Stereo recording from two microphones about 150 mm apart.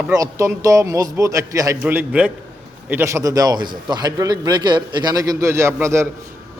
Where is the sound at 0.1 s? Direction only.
20° right (ahead or behind).